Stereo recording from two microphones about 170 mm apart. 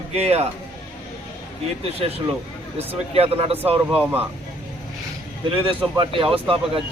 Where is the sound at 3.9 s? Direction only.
10° right (ahead or behind).